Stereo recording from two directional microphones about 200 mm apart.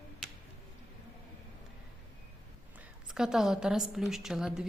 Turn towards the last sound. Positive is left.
turn(degrees=-5)  # may be behind; listen again after turning